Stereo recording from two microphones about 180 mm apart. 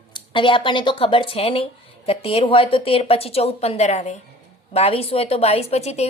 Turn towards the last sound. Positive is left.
turn(degrees=35)  # may be behind; listen again after turning